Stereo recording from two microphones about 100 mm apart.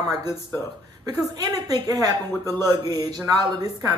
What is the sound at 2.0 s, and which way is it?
Speech, 40° right (ahead or behind).